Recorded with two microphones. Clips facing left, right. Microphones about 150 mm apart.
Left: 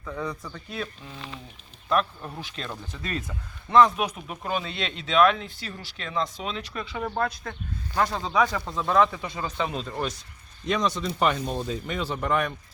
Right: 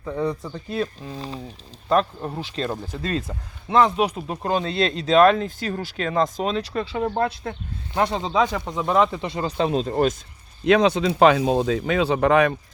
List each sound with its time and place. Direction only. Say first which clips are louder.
0.0 s speech: right 7 dB; 35° right (ahead or behind)
10.7 s speech: right 9 dB; 65° right (ahead or behind); by 12.5 s 80° right